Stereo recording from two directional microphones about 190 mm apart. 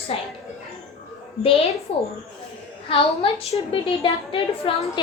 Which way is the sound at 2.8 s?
30° left (ahead or behind).